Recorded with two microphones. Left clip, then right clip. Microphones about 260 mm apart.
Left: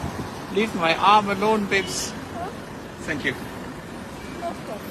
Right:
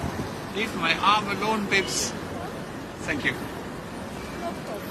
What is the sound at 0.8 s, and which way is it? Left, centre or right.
Speech, centre.